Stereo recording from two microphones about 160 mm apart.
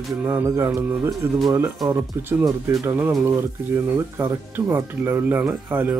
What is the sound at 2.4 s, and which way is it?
Speech, 15° right (ahead or behind).